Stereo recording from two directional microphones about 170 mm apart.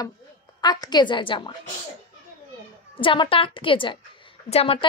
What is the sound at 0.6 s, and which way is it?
Speech, 25° left (ahead or behind).